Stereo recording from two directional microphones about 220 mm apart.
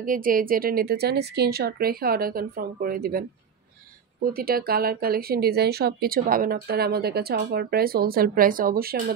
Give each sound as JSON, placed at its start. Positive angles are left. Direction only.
{"t": 0.0, "sound": "speech", "side_deg": -40}